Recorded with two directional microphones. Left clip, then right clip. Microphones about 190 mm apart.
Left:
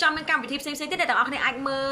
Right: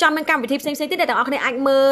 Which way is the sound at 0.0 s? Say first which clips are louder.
Right 6 dB; 35° right (ahead or behind).